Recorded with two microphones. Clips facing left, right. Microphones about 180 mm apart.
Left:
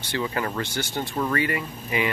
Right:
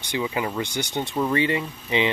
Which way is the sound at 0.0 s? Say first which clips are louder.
Right 1 dB; 15° right (ahead or behind).